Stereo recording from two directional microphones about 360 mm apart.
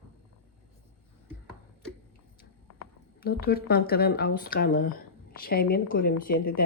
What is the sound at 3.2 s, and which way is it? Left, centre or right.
Speech, left.